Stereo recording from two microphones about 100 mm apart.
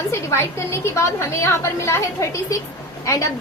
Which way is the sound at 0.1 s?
30° left (ahead or behind).